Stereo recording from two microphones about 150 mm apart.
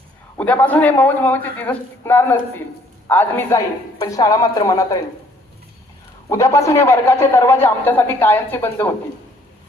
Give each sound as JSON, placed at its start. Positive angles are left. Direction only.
{"t": 0.3, "sound": "a man's voice", "side_deg": 10}
{"t": 6.2, "sound": "a man's voice", "side_deg": 20}